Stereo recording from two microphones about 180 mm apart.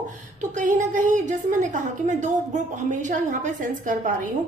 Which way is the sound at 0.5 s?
45° right (ahead or behind).